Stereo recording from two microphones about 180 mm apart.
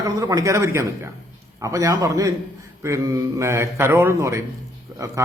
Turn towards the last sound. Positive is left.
turn(degrees=-20)  # may be behind; listen again after turning